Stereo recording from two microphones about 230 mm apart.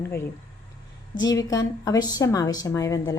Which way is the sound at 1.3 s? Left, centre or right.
Centre.